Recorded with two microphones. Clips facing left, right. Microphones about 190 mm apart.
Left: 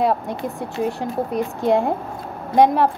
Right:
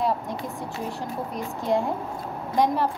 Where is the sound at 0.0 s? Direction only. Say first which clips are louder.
Left 6 dB; 65° left (ahead or behind).